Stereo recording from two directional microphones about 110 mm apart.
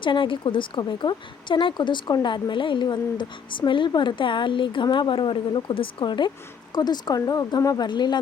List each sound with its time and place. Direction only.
0.0 s speech: 50° left (ahead or behind)